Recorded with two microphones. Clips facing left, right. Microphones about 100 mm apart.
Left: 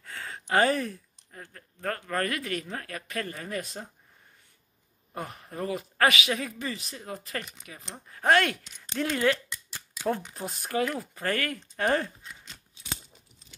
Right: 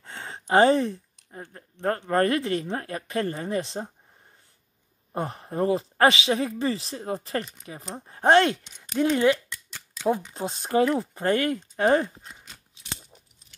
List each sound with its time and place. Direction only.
0.0 s speech: 25° right (ahead or behind)
5.1 s speech: 30° right (ahead or behind)
9.5 s a sound: 10° left (ahead or behind)
10.3 s speech: 25° right (ahead or behind)